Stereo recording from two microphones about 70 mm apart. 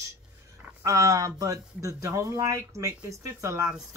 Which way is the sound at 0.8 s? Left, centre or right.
Right.